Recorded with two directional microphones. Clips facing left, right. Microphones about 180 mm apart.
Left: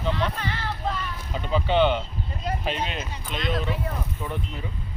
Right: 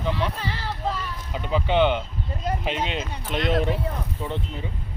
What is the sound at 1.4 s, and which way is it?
Speech, 15° right (ahead or behind).